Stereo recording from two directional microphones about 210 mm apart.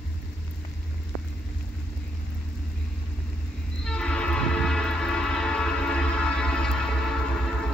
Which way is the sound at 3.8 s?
5° left (ahead or behind).